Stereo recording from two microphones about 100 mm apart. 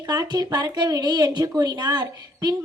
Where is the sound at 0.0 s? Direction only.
40° right (ahead or behind).